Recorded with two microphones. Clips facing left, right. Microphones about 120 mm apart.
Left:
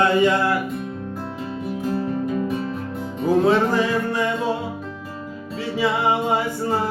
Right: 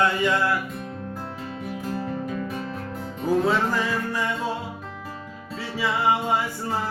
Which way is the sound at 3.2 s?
20° left (ahead or behind).